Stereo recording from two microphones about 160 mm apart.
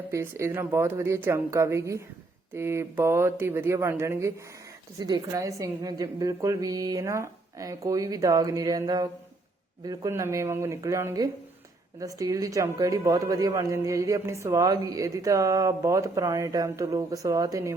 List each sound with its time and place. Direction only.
0.1 s a woman's voice: 15° right (ahead or behind)